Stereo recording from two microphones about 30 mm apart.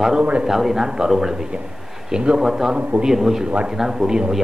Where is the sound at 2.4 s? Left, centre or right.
Centre.